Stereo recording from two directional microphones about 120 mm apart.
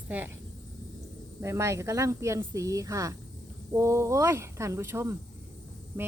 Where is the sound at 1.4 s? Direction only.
25° right (ahead or behind).